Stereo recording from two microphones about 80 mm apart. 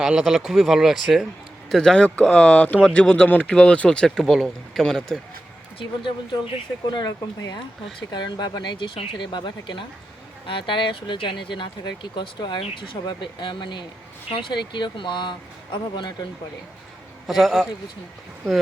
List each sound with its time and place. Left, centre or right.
0.0 s speech: centre
1.7 s speech: centre
6.8 s speech: left
11.8 s speech: left
17.2 s speech: centre